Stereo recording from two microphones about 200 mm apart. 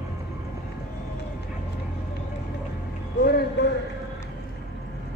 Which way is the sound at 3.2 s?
50° left (ahead or behind).